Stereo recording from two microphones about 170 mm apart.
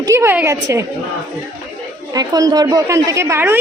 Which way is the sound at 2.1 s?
20° right (ahead or behind).